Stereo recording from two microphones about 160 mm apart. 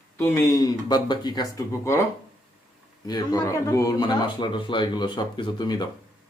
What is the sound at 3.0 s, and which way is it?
Speech, 25° left (ahead or behind).